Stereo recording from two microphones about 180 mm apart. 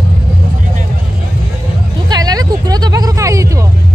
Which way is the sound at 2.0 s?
20° right (ahead or behind).